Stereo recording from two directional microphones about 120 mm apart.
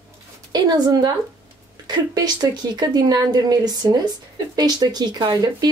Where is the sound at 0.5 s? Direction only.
35° right (ahead or behind).